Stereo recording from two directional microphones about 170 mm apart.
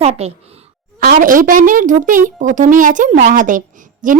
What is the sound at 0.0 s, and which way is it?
Speech, 35° right (ahead or behind).